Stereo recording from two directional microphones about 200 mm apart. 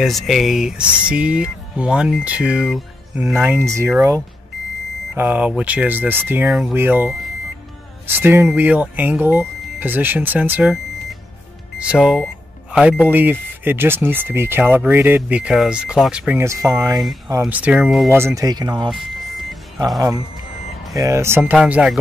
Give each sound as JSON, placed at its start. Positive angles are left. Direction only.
{"t": 0.0, "sound": "speech", "side_deg": 0}
{"t": 5.1, "sound": "speech", "side_deg": -10}
{"t": 11.8, "sound": "speech", "side_deg": -5}
{"t": 18.1, "sound": "speech", "side_deg": -15}
{"t": 18.9, "sound": "a sound", "side_deg": 0}
{"t": 20.9, "sound": "speech", "side_deg": -15}